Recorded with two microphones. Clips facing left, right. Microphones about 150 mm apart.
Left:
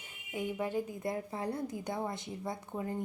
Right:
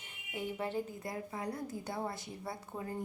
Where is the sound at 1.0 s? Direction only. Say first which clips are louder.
Left 4 dB; 25° left (ahead or behind).